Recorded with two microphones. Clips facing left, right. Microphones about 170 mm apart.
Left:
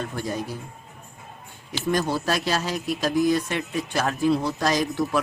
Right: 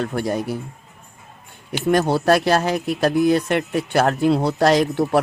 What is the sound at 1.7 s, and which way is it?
Speech, 60° right (ahead or behind).